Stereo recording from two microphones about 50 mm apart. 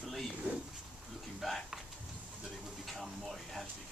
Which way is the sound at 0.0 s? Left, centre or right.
Centre.